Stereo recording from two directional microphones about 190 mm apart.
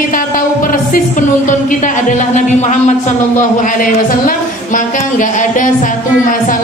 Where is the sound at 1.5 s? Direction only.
40° left (ahead or behind).